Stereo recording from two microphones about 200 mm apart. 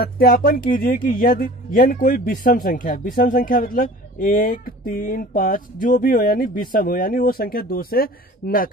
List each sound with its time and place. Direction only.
0.0 s speech: 50° left (ahead or behind)